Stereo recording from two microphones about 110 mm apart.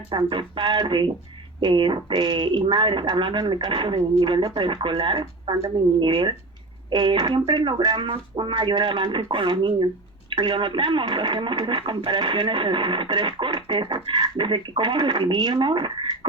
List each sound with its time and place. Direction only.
0.1 s speech: 50° right (ahead or behind)